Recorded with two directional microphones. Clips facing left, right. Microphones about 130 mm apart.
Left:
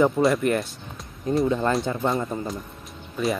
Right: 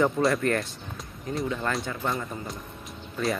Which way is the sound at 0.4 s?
15° left (ahead or behind).